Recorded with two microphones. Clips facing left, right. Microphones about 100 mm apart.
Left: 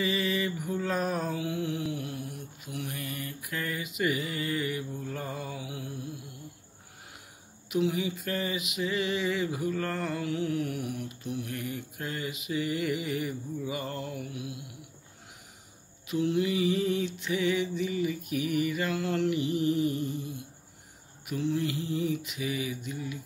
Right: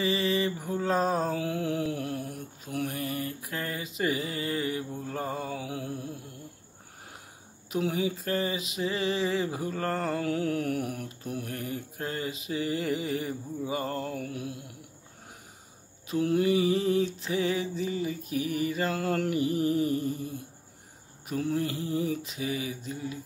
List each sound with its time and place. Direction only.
0.0 s mantra: 35° right (ahead or behind)
7.7 s mantra: 35° right (ahead or behind)
16.1 s mantra: 40° right (ahead or behind)